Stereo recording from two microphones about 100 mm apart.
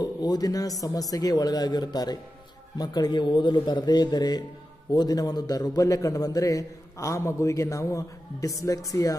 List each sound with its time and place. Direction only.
0.0 s a man's voice: 40° left (ahead or behind)